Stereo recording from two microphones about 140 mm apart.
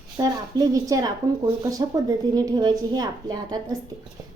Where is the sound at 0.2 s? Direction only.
25° right (ahead or behind).